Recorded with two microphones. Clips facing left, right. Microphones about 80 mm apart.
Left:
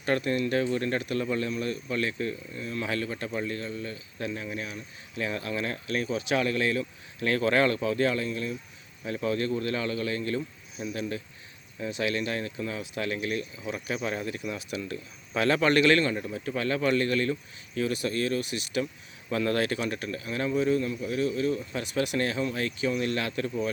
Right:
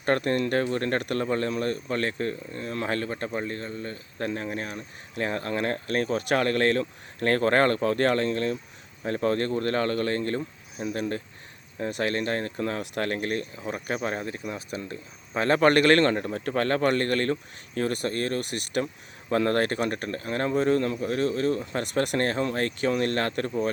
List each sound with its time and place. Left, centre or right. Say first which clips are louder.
0.0 s speech: right 3 dB; right
9.0 s speech: right 3 dB; right